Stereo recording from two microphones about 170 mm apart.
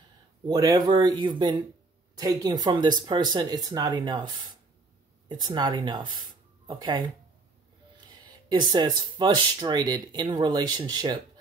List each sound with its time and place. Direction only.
0.5 s speech: 20° right (ahead or behind)
8.1 s speech: 25° right (ahead or behind)